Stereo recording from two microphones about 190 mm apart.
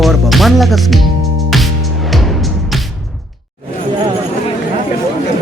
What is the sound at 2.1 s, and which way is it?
Music, centre (ahead or behind).